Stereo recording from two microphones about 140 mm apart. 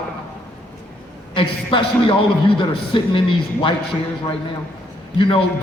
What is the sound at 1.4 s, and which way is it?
A man's voice, 35° left (ahead or behind).